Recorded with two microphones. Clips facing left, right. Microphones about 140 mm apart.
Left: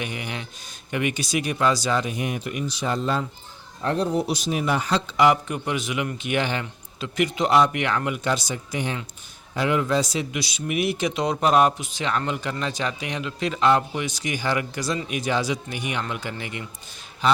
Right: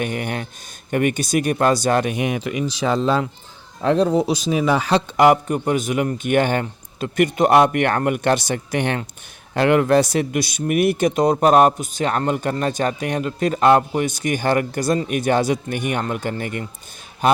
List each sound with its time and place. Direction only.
0.0 s speech: 50° right (ahead or behind)